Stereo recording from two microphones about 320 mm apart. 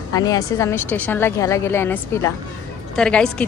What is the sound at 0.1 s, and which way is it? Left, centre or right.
A woman's voice, centre.